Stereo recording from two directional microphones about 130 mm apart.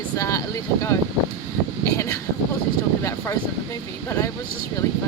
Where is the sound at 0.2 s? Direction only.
25° left (ahead or behind).